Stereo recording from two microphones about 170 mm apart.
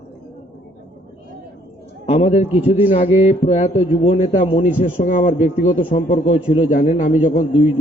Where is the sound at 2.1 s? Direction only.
35° left (ahead or behind).